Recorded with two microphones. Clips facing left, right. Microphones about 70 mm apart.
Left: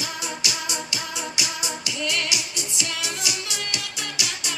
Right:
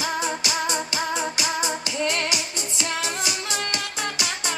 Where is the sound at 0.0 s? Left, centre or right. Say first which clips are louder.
Right 5 dB; right.